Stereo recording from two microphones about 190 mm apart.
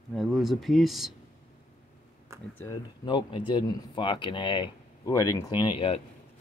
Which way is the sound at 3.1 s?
25° left (ahead or behind).